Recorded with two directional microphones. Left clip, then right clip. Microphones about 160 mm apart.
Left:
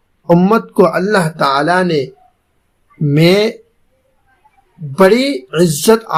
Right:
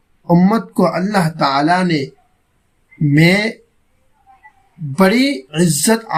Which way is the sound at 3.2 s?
20° left (ahead or behind).